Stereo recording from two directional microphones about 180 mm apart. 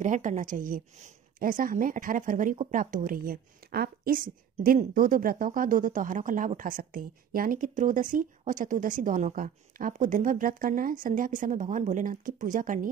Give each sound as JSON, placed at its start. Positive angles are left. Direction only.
{"t": 0.0, "sound": "a woman's voice", "side_deg": -45}